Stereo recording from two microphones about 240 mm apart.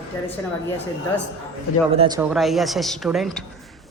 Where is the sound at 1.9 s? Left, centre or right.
Right.